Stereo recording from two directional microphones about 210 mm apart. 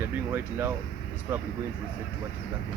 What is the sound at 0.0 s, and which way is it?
Speech, 10° right (ahead or behind).